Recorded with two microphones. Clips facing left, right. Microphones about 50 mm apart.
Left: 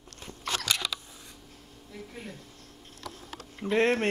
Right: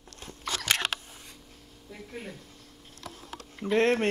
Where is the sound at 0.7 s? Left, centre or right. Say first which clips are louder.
Right 5 dB; right.